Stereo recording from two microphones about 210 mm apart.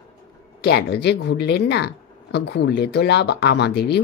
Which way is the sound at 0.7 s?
55° left (ahead or behind).